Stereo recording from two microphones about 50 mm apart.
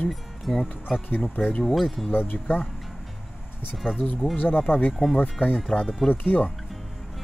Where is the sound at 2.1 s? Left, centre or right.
Left.